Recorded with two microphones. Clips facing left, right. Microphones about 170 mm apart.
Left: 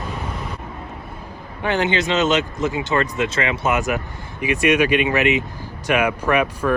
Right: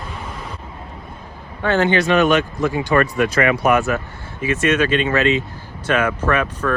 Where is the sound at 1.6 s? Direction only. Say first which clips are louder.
Right 3 dB; 15° left (ahead or behind).